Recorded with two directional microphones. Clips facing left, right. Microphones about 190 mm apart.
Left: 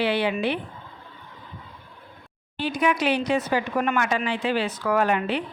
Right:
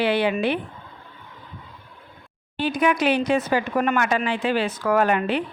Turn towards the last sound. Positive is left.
turn(degrees=-50)  # may be behind; listen again after turning